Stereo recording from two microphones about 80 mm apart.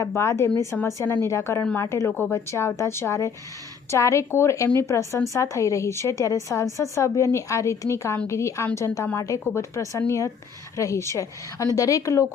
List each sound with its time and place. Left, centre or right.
0.0 s a woman's voice: left
0.7 s a woman's voice: centre
1.3 s a woman's voice: left